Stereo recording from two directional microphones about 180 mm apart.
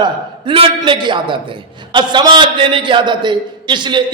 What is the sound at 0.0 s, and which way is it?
A man's voice, 30° right (ahead or behind).